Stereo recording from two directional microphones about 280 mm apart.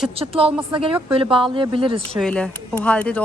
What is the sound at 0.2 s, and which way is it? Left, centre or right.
Speech, centre.